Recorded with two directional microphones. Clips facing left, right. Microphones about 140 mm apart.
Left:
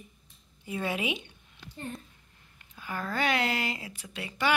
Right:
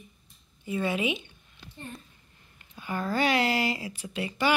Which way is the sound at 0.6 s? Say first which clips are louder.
Right 4 dB; 10° left (ahead or behind).